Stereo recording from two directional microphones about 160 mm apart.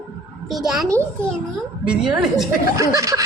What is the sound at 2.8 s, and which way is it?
Speech, 20° right (ahead or behind).